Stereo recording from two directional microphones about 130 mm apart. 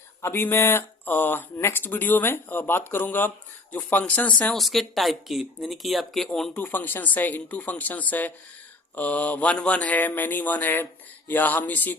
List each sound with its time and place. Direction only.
0.2 s speech: 20° left (ahead or behind)